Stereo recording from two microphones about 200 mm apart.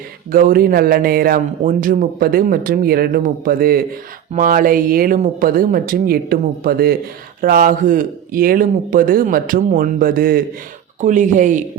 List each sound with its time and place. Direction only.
0.3 s a man's voice: 45° right (ahead or behind)